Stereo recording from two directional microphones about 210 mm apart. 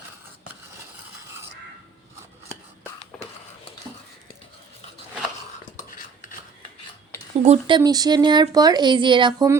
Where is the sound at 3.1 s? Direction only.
5° left (ahead or behind).